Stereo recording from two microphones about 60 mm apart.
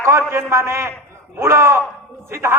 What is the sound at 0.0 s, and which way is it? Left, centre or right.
A man's voice, right.